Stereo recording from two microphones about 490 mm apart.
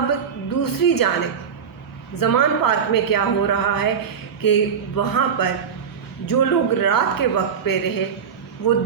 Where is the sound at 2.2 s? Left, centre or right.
Left.